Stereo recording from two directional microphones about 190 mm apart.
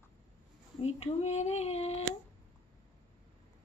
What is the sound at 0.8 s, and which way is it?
Speech, 30° left (ahead or behind).